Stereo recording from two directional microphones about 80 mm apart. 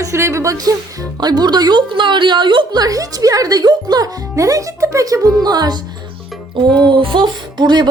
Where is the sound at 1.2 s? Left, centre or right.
Right.